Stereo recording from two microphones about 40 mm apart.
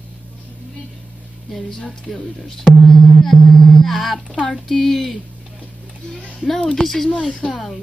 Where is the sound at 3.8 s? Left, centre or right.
Centre.